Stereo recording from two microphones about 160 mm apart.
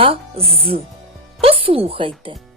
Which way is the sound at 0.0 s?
35° right (ahead or behind).